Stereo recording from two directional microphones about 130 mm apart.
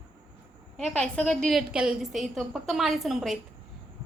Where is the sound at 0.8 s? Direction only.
5° left (ahead or behind).